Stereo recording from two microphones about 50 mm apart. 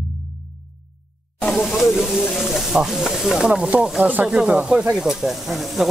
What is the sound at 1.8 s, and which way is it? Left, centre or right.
Speech, centre.